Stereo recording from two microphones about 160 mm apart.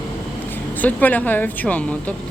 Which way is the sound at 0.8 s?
10° left (ahead or behind).